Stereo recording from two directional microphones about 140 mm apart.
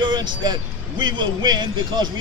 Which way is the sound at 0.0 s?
35° right (ahead or behind).